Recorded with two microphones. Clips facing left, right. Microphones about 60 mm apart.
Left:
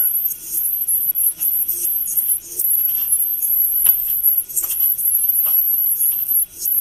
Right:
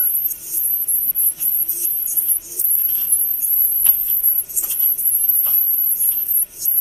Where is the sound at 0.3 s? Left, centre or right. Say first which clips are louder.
Even; right.